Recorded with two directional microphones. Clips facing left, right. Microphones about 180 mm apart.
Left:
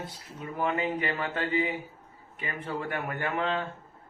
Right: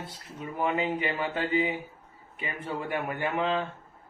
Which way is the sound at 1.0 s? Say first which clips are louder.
Right 1 dB; 10° right (ahead or behind).